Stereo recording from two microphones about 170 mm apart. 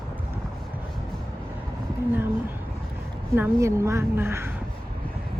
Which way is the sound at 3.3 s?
15° right (ahead or behind).